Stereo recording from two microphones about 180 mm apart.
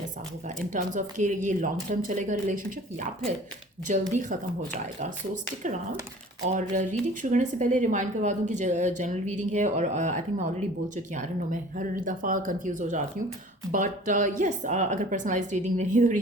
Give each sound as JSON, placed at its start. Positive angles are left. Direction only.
{"t": 0.4, "sound": "speech", "side_deg": -45}
{"t": 4.1, "sound": "speech", "side_deg": -45}
{"t": 6.5, "sound": "speech", "side_deg": -45}